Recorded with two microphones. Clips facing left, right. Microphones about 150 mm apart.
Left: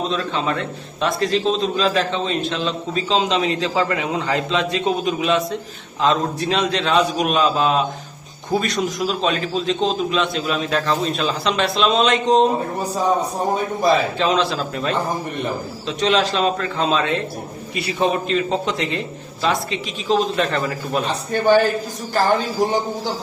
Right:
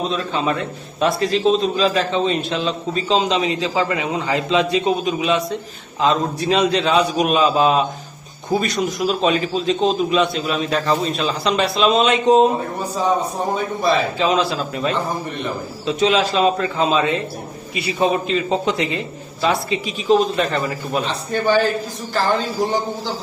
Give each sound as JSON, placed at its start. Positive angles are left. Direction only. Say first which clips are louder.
{"t": 0.0, "sound": "a man's voice", "louder": "right 1 dB", "side_deg": -5}
{"t": 14.2, "sound": "a man's voice", "louder": "right 1 dB", "side_deg": -5}
{"t": 16.0, "sound": "a man's voice", "louder": "right 1 dB", "side_deg": -5}
{"t": 21.4, "sound": "a man's voice", "louder": "left 2 dB", "side_deg": 50}